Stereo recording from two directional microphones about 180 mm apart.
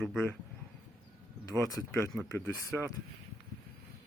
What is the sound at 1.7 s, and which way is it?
Speech, 20° left (ahead or behind).